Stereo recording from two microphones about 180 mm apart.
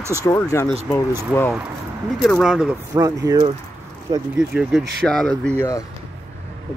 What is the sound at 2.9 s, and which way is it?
Speech, 20° right (ahead or behind).